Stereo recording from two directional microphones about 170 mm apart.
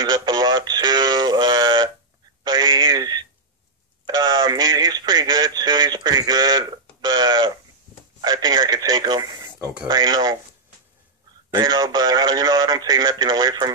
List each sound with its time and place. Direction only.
0.0 s radio: 25° right (ahead or behind)
2.4 s a sound: 25° right (ahead or behind)
4.0 s radio: 25° right (ahead or behind)
8.2 s telephone: 25° right (ahead or behind)
9.8 s a sound: 25° right (ahead or behind)
11.5 s radio: 25° right (ahead or behind)